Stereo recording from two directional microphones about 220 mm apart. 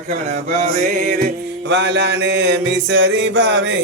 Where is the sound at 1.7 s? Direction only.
50° right (ahead or behind).